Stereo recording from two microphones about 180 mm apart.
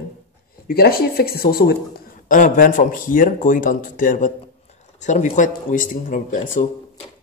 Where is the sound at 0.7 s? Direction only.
55° left (ahead or behind).